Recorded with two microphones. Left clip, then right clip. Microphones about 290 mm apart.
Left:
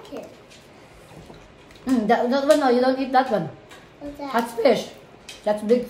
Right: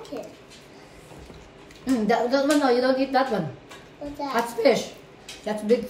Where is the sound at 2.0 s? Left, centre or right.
Centre.